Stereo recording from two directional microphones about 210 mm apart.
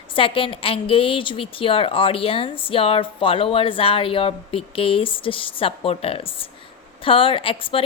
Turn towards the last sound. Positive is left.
turn(degrees=25)  # may be behind; listen again after turning